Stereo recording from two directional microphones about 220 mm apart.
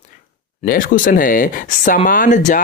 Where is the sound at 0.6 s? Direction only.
40° left (ahead or behind).